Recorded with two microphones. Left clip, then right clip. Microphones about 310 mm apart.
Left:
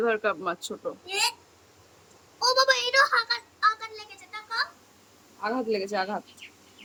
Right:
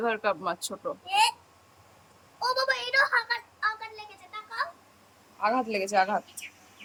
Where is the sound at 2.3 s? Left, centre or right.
Centre.